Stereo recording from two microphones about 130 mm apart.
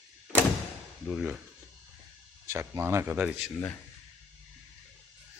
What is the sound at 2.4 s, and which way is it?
Speech, 20° right (ahead or behind).